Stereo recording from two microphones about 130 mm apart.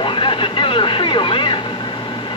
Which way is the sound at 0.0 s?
40° left (ahead or behind).